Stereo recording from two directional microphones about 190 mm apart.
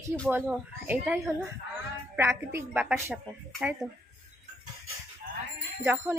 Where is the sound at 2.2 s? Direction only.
10° right (ahead or behind).